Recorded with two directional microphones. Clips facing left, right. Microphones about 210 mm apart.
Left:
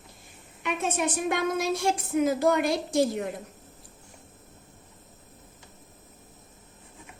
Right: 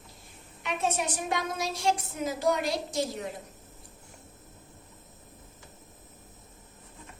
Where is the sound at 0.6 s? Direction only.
55° left (ahead or behind).